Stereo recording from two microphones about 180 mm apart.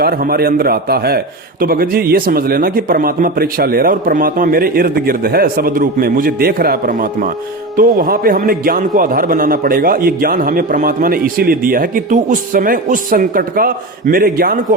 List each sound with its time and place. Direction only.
0.0 s a man's voice: 55° right (ahead or behind)